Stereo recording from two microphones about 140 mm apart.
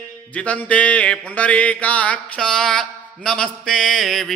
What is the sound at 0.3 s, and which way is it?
Mantra, 10° left (ahead or behind).